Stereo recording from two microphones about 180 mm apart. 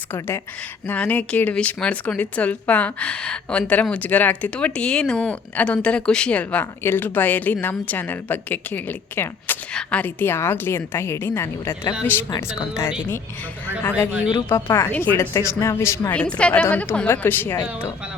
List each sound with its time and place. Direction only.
0.1 s speech: 15° left (ahead or behind)
14.5 s speech: 15° left (ahead or behind)